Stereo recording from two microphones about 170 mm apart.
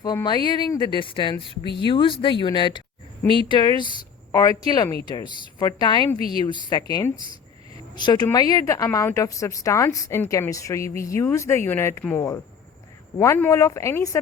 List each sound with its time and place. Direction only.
0.0 s a woman's voice: 20° left (ahead or behind)